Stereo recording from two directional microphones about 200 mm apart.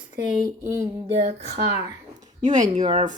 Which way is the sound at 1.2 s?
55° right (ahead or behind).